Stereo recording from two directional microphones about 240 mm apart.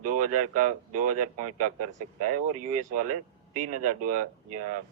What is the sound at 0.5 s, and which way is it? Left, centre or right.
Speech, right.